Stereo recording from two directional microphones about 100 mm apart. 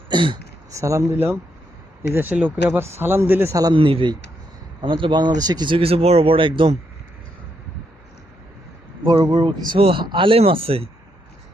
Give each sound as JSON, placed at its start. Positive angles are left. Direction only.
{"t": 0.1, "sound": "speech", "side_deg": -55}
{"t": 0.7, "sound": "speech", "side_deg": -30}
{"t": 3.5, "sound": "a man's voice", "side_deg": -40}
{"t": 3.8, "sound": "speech", "side_deg": -65}
{"t": 9.0, "sound": "speech", "side_deg": -45}